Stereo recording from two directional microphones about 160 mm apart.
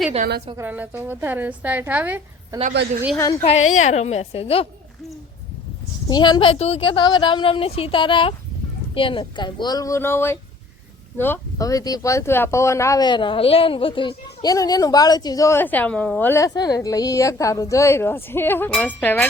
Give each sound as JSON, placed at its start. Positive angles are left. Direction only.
{"t": 0.5, "sound": "a woman's voice", "side_deg": -10}
{"t": 2.5, "sound": "a woman's voice", "side_deg": -20}
{"t": 3.2, "sound": "a woman's voice", "side_deg": 15}
{"t": 3.4, "sound": "a woman's voice", "side_deg": 45}
{"t": 6.1, "sound": "a woman's voice", "side_deg": 25}